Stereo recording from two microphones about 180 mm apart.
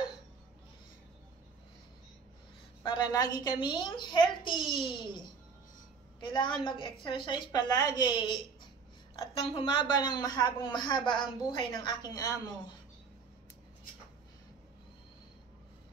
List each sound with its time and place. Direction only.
2.8 s a woman's voice: 25° left (ahead or behind)
6.2 s a woman's voice: 25° left (ahead or behind)
9.5 s a woman's voice: 30° left (ahead or behind)